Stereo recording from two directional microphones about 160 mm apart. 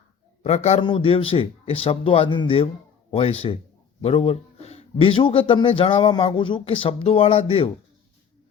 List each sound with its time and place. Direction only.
0.4 s a man's voice: 40° left (ahead or behind)